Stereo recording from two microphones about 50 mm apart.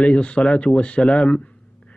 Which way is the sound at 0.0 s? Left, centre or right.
Left.